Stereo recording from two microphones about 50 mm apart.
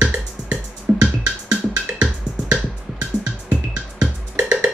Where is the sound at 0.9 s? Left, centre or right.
Right.